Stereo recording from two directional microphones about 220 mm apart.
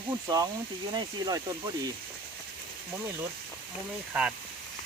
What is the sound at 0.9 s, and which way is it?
Speech, 15° right (ahead or behind).